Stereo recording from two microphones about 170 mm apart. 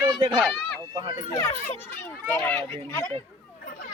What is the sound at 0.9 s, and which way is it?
Speech, 30° right (ahead or behind).